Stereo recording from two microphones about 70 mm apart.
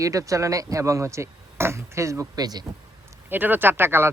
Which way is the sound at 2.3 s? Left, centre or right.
Right.